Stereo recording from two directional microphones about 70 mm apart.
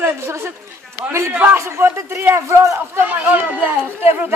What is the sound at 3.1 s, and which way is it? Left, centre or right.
Speech, right.